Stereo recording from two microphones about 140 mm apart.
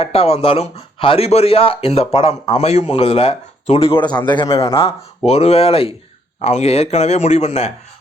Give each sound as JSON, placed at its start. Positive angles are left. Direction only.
{"t": 0.0, "sound": "a man's voice", "side_deg": 45}
{"t": 5.2, "sound": "speech", "side_deg": 50}